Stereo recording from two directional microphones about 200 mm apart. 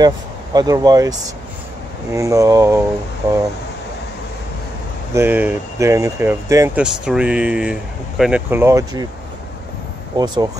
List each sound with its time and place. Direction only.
0.0 s speech: 20° right (ahead or behind)
2.1 s speech: 15° right (ahead or behind)
5.1 s speech: 10° right (ahead or behind)
10.1 s speech: 20° right (ahead or behind)